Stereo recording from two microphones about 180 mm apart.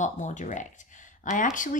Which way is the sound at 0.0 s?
45° left (ahead or behind).